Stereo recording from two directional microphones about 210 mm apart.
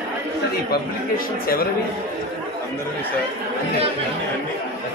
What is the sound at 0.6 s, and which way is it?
Speech, 45° left (ahead or behind).